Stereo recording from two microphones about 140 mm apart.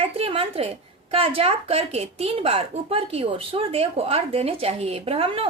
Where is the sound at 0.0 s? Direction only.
40° right (ahead or behind).